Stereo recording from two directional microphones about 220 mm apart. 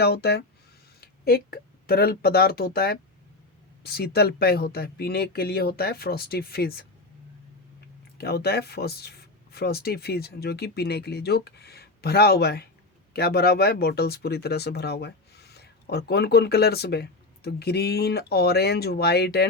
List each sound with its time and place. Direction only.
0.0 s speech: 45° left (ahead or behind)
8.2 s speech: 45° left (ahead or behind)